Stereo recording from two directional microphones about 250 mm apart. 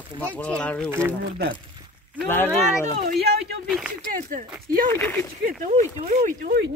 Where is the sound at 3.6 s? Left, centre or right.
Centre.